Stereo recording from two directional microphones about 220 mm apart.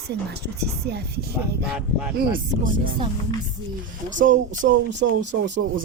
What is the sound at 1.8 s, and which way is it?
Speech, 5° right (ahead or behind).